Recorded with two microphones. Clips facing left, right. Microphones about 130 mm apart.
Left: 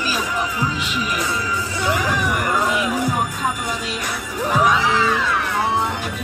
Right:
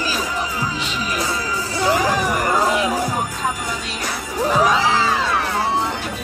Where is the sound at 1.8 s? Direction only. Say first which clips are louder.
Right 3 dB; 35° right (ahead or behind).